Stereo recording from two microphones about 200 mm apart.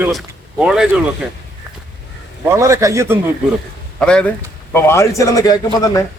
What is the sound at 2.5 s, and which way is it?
Speech, 15° right (ahead or behind).